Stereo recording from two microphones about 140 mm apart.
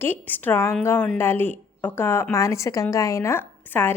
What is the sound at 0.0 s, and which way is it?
A woman's voice, 15° left (ahead or behind).